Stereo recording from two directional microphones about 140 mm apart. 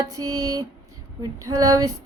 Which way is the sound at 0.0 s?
25° right (ahead or behind).